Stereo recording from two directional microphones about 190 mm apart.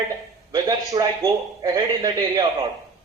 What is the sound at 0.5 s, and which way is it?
A man's voice, 20° right (ahead or behind).